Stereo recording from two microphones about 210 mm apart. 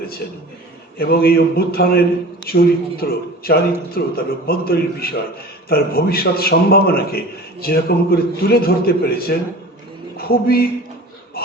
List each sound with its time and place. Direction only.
0.9 s a man's voice: 45° left (ahead or behind)